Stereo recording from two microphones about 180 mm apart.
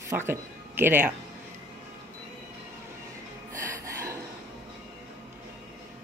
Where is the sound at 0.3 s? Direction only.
10° right (ahead or behind).